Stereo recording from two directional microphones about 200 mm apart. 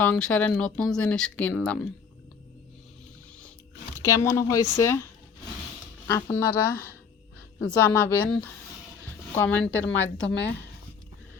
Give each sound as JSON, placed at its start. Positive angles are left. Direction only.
{"t": 0.0, "sound": "speech", "side_deg": 5}
{"t": 3.9, "sound": "speech", "side_deg": 15}
{"t": 6.1, "sound": "speech", "side_deg": 15}
{"t": 9.9, "sound": "a woman's voice", "side_deg": 65}